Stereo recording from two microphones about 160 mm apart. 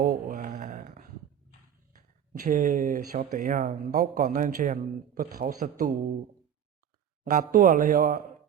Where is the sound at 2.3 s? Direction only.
55° right (ahead or behind).